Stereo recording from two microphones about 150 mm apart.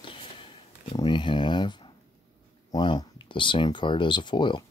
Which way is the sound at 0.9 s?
30° left (ahead or behind).